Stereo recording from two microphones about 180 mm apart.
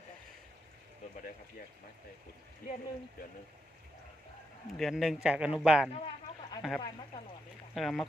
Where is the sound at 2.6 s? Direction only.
55° left (ahead or behind).